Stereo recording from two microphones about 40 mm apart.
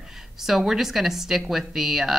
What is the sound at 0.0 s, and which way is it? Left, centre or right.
A woman's voice, centre.